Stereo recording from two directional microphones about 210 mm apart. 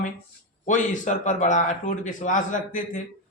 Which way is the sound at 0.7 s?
35° left (ahead or behind).